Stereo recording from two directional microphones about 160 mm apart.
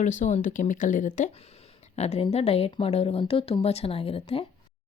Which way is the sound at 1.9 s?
40° left (ahead or behind).